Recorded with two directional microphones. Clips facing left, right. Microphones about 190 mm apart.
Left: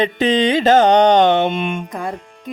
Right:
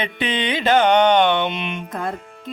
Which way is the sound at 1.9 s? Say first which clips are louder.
Left 1 dB; 10° left (ahead or behind).